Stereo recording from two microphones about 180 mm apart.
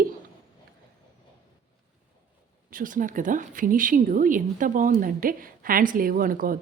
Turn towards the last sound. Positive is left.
turn(degrees=-50)  # may be behind; listen again after turning